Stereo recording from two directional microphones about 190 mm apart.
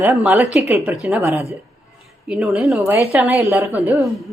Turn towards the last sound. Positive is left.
turn(degrees=-15)  # may be behind; listen again after turning